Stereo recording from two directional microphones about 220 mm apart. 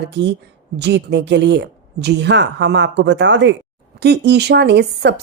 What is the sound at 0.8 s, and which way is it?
A woman's voice, 50° right (ahead or behind).